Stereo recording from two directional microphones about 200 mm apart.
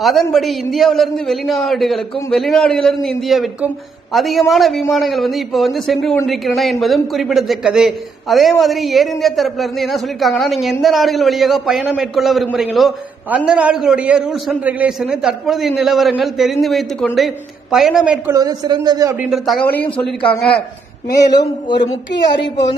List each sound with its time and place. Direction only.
0.0 s a man's voice: centre (ahead or behind)
18.3 s a man's voice: 20° right (ahead or behind)
19.3 s a man's voice: centre (ahead or behind)
21.1 s speech: 20° left (ahead or behind)